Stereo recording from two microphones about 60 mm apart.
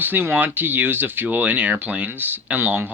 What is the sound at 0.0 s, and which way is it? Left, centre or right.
Speech, right.